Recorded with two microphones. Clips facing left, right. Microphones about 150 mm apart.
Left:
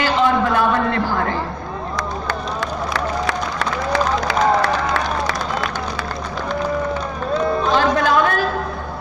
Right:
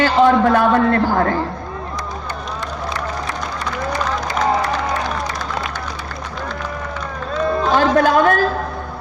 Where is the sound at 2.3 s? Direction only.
90° left.